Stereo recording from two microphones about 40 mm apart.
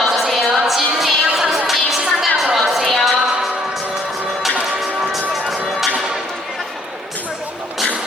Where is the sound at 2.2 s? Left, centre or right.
Centre.